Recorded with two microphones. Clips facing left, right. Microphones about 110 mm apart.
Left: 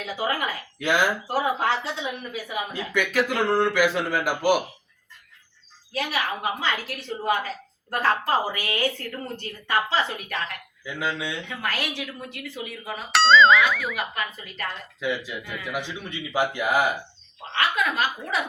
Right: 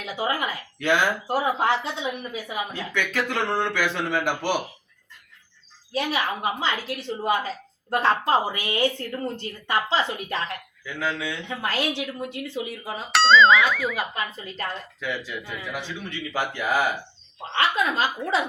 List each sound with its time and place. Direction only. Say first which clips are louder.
0.0 s speech: even; 20° right (ahead or behind)
0.8 s a man's voice: right 1 dB; 10° left (ahead or behind)
1.3 s speech: right 1 dB; 20° right (ahead or behind)
2.7 s a man's voice: left 5 dB; 10° left (ahead or behind)
5.9 s speech: right 2 dB; 25° right (ahead or behind)
10.8 s a man's voice: even; 15° left (ahead or behind)
11.4 s speech: right 3 dB; 30° right (ahead or behind)
13.1 s speech: even; centre (ahead or behind)
13.9 s speech: right 1 dB; 25° right (ahead or behind)
15.3 s a man's voice: left 1 dB; 15° left (ahead or behind)
17.5 s speech: right 1 dB; 30° right (ahead or behind)